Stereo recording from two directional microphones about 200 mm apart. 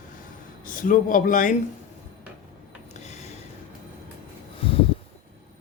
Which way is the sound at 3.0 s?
35° left (ahead or behind).